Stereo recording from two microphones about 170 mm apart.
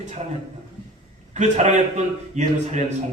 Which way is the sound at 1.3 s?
45° right (ahead or behind).